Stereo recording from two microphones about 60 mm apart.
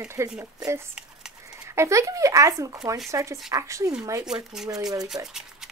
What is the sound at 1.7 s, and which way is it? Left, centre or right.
Speech, right.